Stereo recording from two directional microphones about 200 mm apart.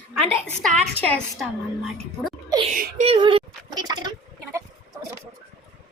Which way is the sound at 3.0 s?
25° right (ahead or behind).